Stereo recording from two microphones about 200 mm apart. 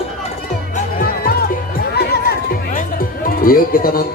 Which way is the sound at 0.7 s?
45° left (ahead or behind).